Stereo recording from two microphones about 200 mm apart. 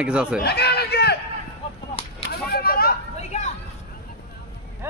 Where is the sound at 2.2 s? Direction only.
50° left (ahead or behind).